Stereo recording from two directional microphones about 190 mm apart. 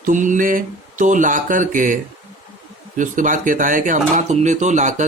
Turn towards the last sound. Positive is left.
turn(degrees=-40)  # may be behind; listen again after turning